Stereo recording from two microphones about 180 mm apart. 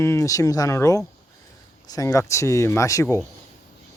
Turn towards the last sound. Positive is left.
turn(degrees=15)  # may be behind; listen again after turning